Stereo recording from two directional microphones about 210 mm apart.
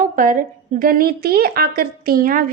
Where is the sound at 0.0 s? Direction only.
40° right (ahead or behind).